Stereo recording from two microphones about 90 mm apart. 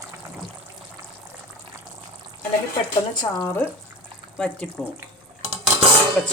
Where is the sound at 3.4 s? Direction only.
25° left (ahead or behind).